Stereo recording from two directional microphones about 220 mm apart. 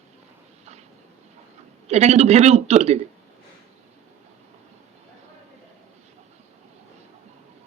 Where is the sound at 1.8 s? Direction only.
30° right (ahead or behind).